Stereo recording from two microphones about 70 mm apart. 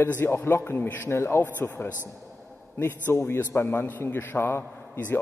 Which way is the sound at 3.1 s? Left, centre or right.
Left.